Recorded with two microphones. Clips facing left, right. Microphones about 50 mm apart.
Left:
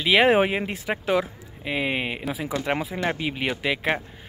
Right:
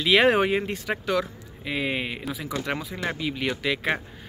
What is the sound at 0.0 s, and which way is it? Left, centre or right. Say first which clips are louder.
Speech: left 1 dB; centre.